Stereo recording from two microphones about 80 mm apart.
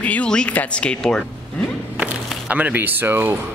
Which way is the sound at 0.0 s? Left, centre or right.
Centre.